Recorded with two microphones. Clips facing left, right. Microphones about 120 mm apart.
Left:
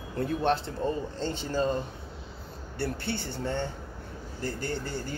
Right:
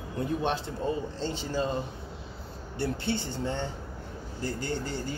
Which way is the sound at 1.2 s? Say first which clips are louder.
Left 1 dB; 50° left (ahead or behind).